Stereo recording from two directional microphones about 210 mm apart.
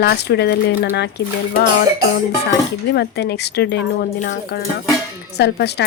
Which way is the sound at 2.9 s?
50° left (ahead or behind).